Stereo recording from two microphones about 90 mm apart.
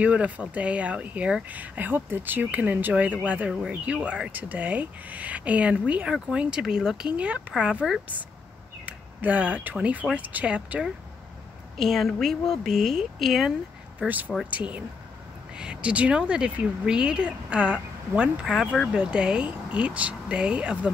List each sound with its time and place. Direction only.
0.0 s speech: 15° right (ahead or behind)
11.7 s a woman's voice: centre (ahead or behind)
13.9 s speech: 20° right (ahead or behind)